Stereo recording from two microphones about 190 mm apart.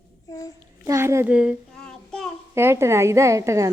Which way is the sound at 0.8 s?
15° right (ahead or behind).